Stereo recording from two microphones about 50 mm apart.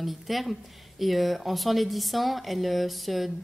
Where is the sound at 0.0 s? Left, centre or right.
Centre.